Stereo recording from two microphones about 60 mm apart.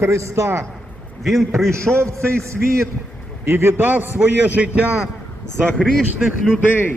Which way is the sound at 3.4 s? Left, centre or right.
Right.